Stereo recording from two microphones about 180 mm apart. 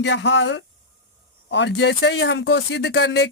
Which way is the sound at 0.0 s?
85° left.